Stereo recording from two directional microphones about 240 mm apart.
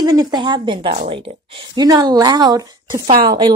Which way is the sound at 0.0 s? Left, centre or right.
Centre.